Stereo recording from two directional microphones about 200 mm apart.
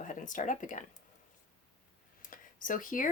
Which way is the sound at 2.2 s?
40° left (ahead or behind).